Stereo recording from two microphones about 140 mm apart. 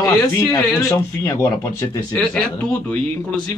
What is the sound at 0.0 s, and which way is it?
Speech, 20° left (ahead or behind).